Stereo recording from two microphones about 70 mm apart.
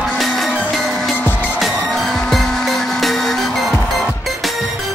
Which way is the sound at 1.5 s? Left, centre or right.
Centre.